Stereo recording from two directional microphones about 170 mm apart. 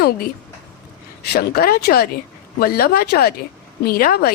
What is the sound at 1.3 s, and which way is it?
A woman's voice, 60° left (ahead or behind).